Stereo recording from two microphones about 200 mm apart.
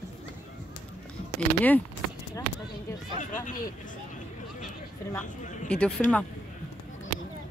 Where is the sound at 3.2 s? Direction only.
40° left (ahead or behind).